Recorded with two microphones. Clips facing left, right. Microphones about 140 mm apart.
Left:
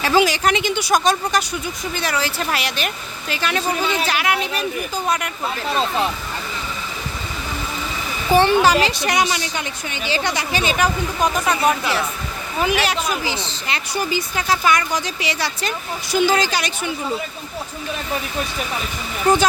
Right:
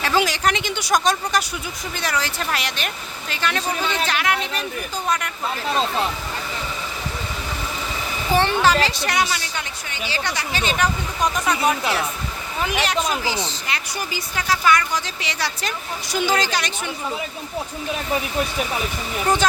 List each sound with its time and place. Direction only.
0.0 s speech: 5° left (ahead or behind)
8.4 s speech: 15° left (ahead or behind)
13.2 s speech: 30° left (ahead or behind); by 16.9 s 10° left (ahead or behind)
19.3 s speech: 10° left (ahead or behind)